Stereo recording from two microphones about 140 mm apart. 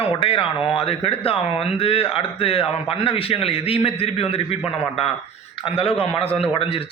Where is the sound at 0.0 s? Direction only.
40° left (ahead or behind).